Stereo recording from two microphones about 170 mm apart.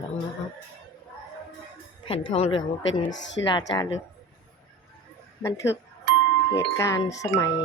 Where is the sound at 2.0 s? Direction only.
35° left (ahead or behind).